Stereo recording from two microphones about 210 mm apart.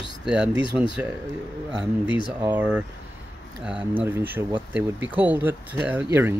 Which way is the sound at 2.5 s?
5° right (ahead or behind).